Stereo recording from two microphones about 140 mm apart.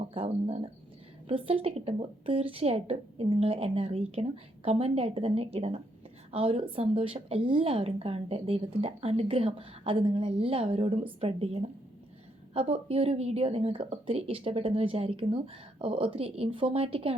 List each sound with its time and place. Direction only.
0.0 s a woman's voice: 40° right (ahead or behind)